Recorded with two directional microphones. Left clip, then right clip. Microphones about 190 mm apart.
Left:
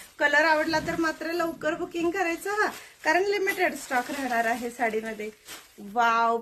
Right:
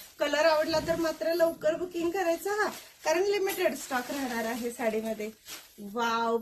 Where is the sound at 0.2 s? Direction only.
20° left (ahead or behind).